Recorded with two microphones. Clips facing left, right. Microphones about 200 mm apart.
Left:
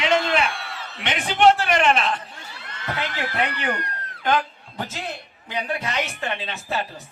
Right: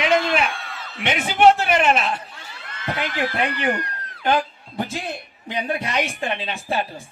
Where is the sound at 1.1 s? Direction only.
10° right (ahead or behind).